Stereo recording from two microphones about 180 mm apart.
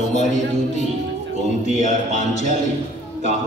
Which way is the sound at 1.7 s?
40° left (ahead or behind).